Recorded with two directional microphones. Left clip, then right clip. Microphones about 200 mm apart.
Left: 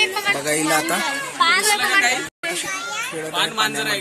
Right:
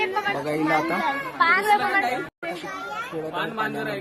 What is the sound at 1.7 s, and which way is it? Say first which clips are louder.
Speech: left 3 dB; 30° right (ahead or behind).